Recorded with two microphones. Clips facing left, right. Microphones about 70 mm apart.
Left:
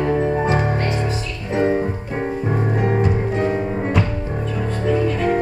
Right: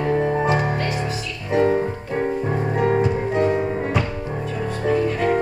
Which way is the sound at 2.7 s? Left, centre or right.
Left.